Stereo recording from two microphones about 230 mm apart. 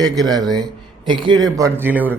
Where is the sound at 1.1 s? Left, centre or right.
Right.